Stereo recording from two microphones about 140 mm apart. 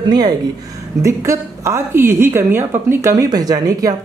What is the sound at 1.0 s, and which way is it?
A woman's voice, 20° right (ahead or behind).